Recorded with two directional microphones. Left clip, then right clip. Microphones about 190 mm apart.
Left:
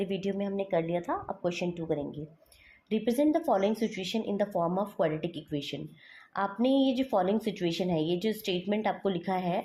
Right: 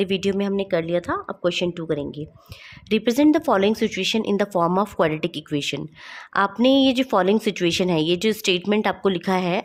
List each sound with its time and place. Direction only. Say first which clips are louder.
0.0 s speech: right 10 dB; 40° right (ahead or behind)